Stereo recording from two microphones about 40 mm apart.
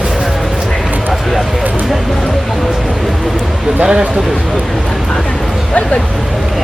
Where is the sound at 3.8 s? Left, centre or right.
Right.